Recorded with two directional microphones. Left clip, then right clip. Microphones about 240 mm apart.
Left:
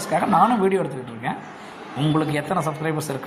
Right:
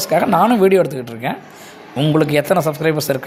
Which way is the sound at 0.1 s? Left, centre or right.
Right.